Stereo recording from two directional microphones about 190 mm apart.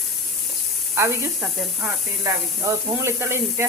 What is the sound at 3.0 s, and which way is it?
Speech, 15° right (ahead or behind).